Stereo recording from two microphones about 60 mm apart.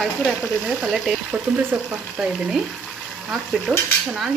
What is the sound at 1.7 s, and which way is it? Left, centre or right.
Stir, centre.